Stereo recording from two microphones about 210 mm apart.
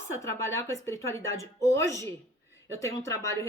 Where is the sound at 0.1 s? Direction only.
15° left (ahead or behind).